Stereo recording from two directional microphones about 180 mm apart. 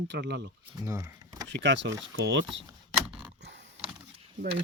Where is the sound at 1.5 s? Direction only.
80° right.